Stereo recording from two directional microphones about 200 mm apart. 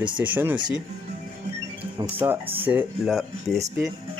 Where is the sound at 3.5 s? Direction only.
15° right (ahead or behind).